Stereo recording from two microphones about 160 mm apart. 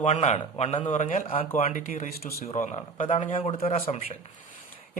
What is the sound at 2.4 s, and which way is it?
A man's voice, 45° left (ahead or behind).